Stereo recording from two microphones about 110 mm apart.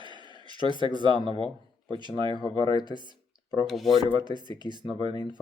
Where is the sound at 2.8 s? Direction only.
45° right (ahead or behind).